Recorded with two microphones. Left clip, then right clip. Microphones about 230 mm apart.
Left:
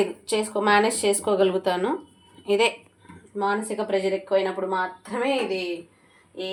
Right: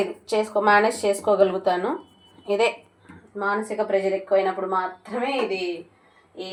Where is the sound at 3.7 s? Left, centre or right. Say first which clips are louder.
Right 2 dB; left.